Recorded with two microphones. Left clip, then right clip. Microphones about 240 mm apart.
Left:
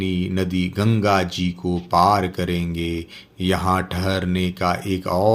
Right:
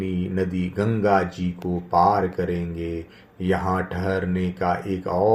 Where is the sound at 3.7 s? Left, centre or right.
Left.